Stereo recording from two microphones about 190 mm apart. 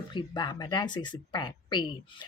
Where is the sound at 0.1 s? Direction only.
25° left (ahead or behind).